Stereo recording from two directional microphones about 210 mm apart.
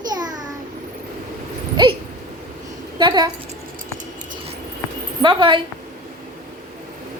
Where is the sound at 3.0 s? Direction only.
20° right (ahead or behind).